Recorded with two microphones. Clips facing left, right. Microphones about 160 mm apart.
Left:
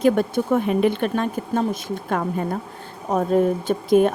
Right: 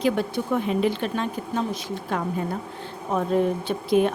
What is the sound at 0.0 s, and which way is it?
A woman's voice, 50° left (ahead or behind).